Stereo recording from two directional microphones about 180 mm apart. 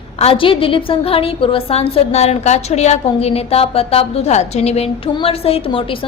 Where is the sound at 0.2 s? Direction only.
30° left (ahead or behind).